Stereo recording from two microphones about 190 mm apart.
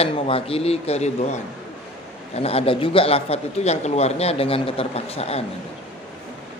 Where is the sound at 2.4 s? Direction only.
30° left (ahead or behind).